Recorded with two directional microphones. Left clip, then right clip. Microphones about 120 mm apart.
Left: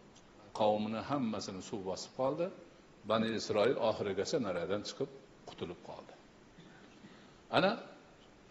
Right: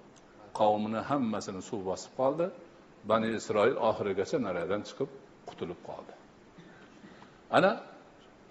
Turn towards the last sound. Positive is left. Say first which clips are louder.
# right 6 dB
turn(degrees=-25)  # may be behind; listen again after turning